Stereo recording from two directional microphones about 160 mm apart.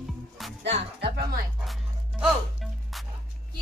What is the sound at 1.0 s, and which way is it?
Speech, 75° right (ahead or behind).